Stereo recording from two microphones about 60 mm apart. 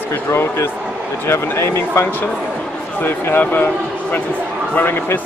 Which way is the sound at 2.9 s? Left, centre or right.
Left.